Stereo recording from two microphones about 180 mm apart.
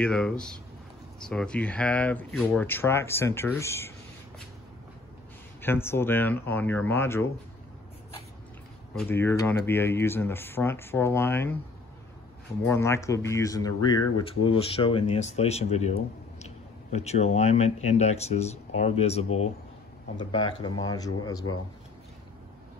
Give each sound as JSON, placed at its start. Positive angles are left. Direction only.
{"t": 0.0, "sound": "speech", "side_deg": 5}
{"t": 5.6, "sound": "speech", "side_deg": 10}
{"t": 9.1, "sound": "speech", "side_deg": 15}
{"t": 12.6, "sound": "speech", "side_deg": 15}